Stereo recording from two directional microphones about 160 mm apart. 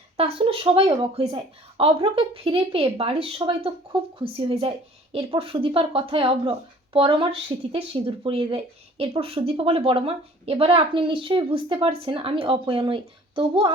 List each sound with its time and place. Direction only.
0.2 s a woman's voice: 35° right (ahead or behind)